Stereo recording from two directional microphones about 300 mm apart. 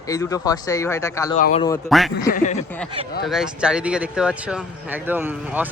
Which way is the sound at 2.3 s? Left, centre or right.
Left.